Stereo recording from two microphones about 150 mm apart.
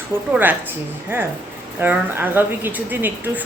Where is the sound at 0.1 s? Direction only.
15° right (ahead or behind).